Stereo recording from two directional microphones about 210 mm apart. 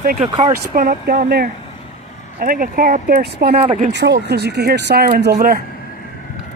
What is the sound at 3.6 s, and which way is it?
Speech, 30° right (ahead or behind).